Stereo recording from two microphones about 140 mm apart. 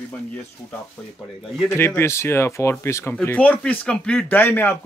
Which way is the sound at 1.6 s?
15° left (ahead or behind).